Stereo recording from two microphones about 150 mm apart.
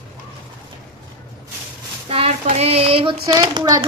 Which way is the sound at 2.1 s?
40° right (ahead or behind).